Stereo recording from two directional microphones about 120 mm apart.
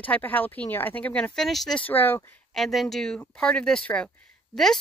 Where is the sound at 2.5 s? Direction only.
Centre (ahead or behind).